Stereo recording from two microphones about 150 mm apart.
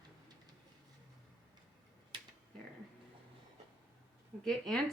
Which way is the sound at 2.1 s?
30° right (ahead or behind).